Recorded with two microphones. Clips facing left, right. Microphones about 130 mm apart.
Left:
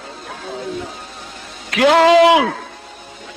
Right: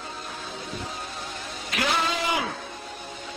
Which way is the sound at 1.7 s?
90° left.